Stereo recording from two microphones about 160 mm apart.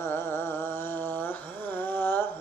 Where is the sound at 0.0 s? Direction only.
15° left (ahead or behind).